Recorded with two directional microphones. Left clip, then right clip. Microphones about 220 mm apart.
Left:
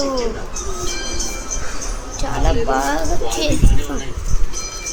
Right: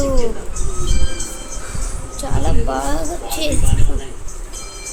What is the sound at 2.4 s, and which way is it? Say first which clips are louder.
Music: left 4 dB; 10° right (ahead or behind).